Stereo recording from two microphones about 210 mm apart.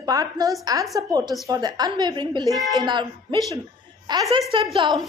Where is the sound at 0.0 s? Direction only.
15° right (ahead or behind).